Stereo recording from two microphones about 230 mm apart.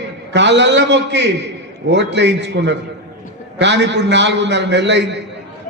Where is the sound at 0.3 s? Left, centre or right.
Right.